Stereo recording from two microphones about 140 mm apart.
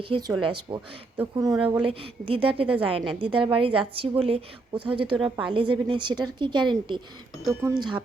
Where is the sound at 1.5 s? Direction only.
10° right (ahead or behind).